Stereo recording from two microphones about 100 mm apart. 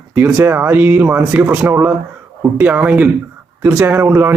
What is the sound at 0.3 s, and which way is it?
Speech, 25° right (ahead or behind).